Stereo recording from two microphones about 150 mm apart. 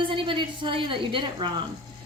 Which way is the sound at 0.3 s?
35° right (ahead or behind).